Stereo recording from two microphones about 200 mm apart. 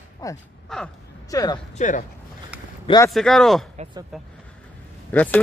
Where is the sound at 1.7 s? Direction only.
40° left (ahead or behind).